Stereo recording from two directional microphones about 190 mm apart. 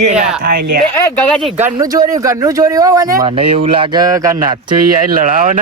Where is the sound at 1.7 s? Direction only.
20° right (ahead or behind).